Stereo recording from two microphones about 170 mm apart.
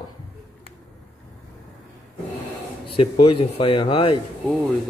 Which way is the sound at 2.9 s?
30° left (ahead or behind).